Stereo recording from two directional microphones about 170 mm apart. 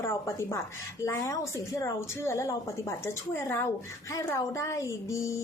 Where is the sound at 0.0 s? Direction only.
15° left (ahead or behind).